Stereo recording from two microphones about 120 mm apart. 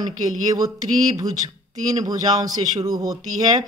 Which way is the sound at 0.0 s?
30° right (ahead or behind).